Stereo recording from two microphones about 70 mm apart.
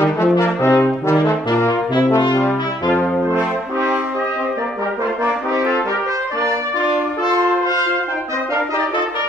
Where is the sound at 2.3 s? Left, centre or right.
Left.